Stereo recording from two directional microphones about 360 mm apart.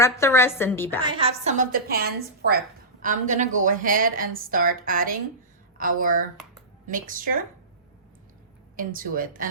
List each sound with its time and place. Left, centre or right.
0.0 s a woman's voice: centre
1.0 s a woman's voice: centre
3.0 s a woman's voice: right
8.7 s a woman's voice: right